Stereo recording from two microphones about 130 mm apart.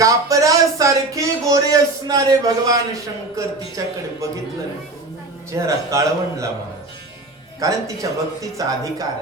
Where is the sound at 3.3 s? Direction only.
25° right (ahead or behind).